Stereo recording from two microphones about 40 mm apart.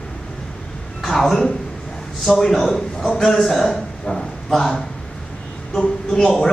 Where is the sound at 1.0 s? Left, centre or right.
Centre.